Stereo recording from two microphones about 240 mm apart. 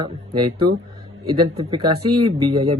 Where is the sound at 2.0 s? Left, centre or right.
Right.